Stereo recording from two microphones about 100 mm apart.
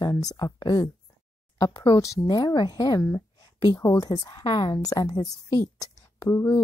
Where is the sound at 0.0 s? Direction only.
40° left (ahead or behind).